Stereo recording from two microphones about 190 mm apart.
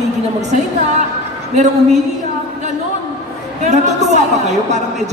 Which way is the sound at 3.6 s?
40° right (ahead or behind).